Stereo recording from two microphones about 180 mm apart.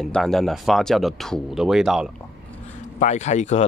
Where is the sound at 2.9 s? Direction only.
40° left (ahead or behind).